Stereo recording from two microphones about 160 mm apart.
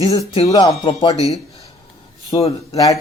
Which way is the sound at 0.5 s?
30° left (ahead or behind).